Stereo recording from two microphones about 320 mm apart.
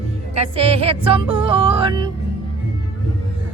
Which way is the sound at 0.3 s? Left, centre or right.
Centre.